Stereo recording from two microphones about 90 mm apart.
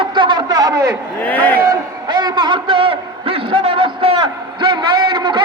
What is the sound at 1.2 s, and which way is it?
Speech, 20° left (ahead or behind).